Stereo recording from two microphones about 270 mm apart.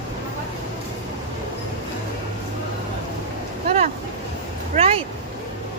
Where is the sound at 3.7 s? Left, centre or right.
Right.